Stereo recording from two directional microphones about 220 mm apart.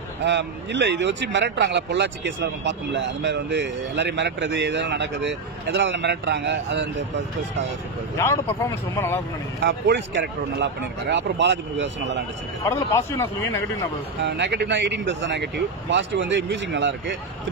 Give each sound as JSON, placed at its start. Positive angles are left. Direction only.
{"t": 0.2, "sound": "speech", "side_deg": -55}
{"t": 8.2, "sound": "speech", "side_deg": 10}
{"t": 9.7, "sound": "speech", "side_deg": -55}
{"t": 12.6, "sound": "speech", "side_deg": 15}
{"t": 14.2, "sound": "speech", "side_deg": -50}